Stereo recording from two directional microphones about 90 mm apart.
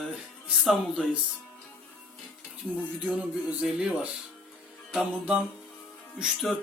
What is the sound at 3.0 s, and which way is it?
Speech, 15° right (ahead or behind).